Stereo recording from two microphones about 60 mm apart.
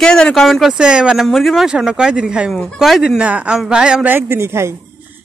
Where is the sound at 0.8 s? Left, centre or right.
Centre.